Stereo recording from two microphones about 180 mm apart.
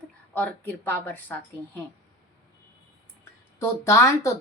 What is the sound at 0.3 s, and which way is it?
Speech, 10° left (ahead or behind).